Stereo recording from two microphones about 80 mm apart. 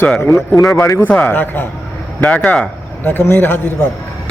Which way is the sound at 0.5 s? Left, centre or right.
Left.